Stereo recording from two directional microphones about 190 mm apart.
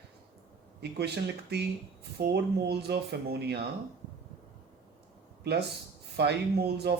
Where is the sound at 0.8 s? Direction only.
60° right (ahead or behind).